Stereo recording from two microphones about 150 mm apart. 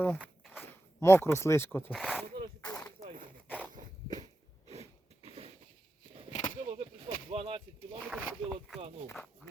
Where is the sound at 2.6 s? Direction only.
10° left (ahead or behind).